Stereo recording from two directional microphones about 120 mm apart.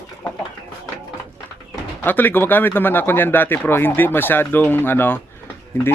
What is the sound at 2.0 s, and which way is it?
Speech, 15° left (ahead or behind).